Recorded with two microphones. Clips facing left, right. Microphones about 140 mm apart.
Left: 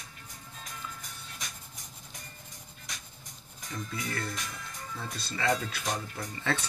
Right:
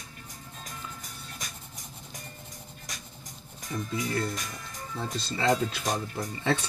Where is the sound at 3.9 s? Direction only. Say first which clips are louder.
Right 6 dB; 25° right (ahead or behind).